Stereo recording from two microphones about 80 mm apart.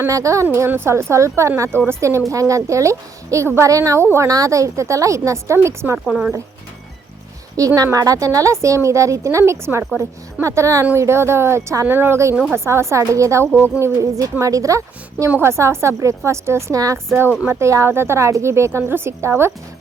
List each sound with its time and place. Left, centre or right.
0.1 s a woman's voice: right
4.3 s a woman's voice: right
6.1 s speech: centre
7.6 s a woman's voice: right
11.9 s a woman's voice: right
17.1 s a woman's voice: right